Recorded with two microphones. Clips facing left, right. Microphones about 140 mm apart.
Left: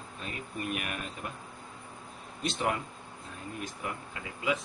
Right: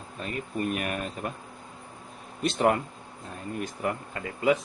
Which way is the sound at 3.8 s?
50° right (ahead or behind).